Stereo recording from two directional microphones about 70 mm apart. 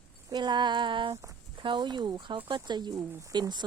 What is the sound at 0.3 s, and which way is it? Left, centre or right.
Speech, right.